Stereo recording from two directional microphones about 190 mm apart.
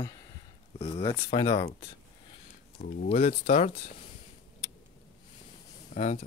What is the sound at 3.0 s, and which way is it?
Speech, 40° left (ahead or behind).